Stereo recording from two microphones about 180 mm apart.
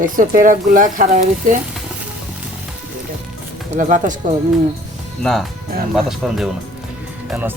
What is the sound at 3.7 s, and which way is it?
Speech, 45° right (ahead or behind).